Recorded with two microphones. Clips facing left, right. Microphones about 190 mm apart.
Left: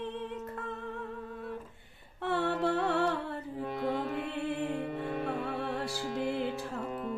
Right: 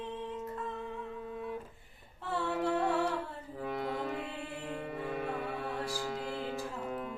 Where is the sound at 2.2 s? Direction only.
65° left (ahead or behind).